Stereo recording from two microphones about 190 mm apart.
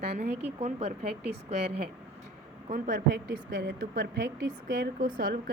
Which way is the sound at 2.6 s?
45° right (ahead or behind).